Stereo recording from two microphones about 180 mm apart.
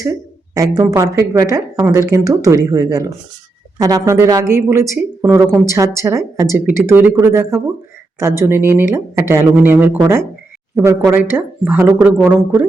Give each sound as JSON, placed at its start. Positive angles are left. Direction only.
{"t": 0.0, "sound": "speech", "side_deg": -20}
{"t": 11.1, "sound": "speech", "side_deg": -15}